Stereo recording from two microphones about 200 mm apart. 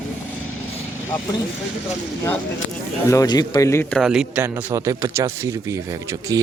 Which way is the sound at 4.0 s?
5° right (ahead or behind).